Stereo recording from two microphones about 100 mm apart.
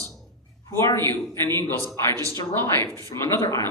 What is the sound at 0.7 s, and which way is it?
A man's voice, 30° left (ahead or behind).